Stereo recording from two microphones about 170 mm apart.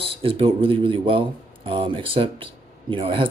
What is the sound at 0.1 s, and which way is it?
Speech, 30° right (ahead or behind).